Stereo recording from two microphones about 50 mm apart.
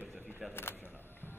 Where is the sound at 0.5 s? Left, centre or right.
Left.